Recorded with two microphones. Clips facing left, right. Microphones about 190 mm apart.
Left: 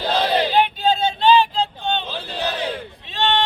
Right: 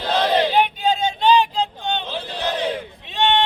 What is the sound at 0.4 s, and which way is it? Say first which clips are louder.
Vehicle: even; 15° right (ahead or behind).